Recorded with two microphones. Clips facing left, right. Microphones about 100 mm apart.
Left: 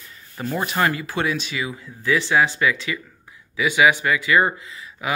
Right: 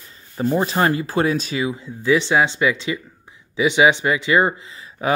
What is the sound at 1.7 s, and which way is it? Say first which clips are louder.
Speech: right 4 dB; 20° right (ahead or behind).